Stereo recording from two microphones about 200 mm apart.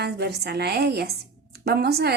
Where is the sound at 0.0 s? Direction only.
55° right (ahead or behind).